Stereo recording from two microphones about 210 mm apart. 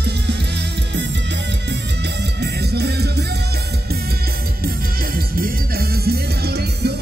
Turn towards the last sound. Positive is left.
turn(degrees=-50)  # may be behind; listen again after turning